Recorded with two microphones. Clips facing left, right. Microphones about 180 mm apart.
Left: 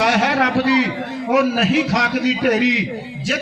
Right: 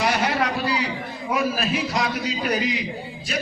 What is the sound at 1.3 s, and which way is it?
A man's voice, 75° left (ahead or behind).